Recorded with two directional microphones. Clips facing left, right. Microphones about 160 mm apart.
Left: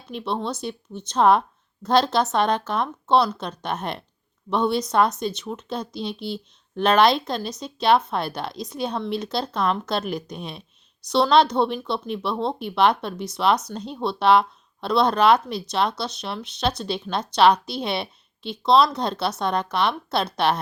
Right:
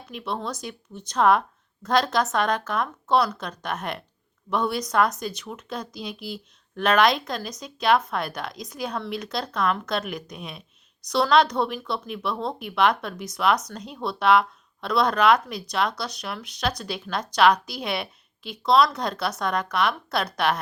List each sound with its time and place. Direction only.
0.1 s speech: 30° left (ahead or behind)